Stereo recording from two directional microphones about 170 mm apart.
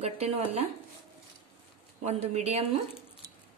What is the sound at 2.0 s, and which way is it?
Speech, 40° right (ahead or behind).